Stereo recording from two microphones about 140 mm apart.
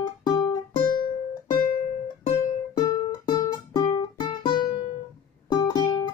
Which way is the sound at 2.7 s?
25° left (ahead or behind).